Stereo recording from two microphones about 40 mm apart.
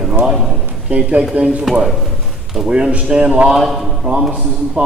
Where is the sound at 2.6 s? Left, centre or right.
Right.